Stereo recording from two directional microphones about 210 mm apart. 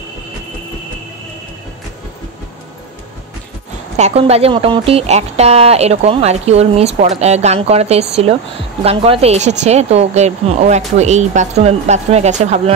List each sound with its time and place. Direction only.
3.9 s a woman's voice: 30° right (ahead or behind)